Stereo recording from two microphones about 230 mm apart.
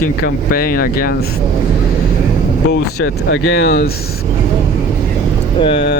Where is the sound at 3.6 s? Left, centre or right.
Left.